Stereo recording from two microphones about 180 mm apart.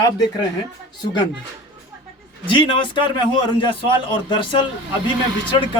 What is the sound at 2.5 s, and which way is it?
Speech, 25° left (ahead or behind).